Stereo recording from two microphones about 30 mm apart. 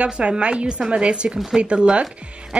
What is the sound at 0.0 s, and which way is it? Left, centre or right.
A woman's voice, right.